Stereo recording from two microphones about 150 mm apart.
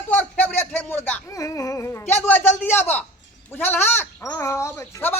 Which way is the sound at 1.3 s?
20° left (ahead or behind).